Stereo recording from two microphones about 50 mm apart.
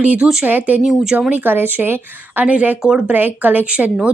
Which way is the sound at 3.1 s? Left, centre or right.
Right.